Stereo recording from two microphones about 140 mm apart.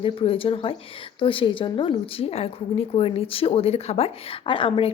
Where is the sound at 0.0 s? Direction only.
40° left (ahead or behind).